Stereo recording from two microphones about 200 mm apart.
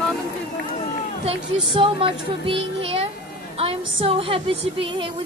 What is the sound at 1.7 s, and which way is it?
A woman's voice, 25° right (ahead or behind).